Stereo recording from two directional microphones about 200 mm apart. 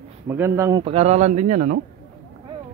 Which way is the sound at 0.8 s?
30° right (ahead or behind).